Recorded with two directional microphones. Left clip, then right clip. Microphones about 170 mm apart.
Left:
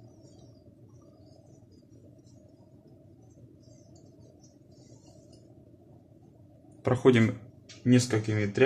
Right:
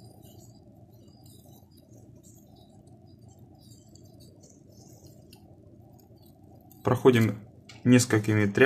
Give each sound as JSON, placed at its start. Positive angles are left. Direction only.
{"t": 6.8, "sound": "speech", "side_deg": -10}
{"t": 7.8, "sound": "speech", "side_deg": -25}